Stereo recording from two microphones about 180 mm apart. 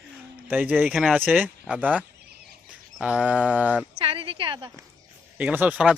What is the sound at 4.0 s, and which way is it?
Speech, 30° right (ahead or behind).